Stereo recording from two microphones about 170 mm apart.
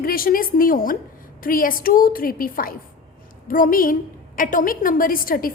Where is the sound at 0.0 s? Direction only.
60° left (ahead or behind).